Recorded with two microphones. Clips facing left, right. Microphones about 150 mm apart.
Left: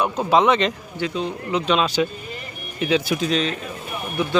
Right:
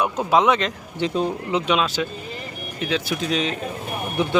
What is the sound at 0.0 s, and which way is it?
Speech, 5° right (ahead or behind).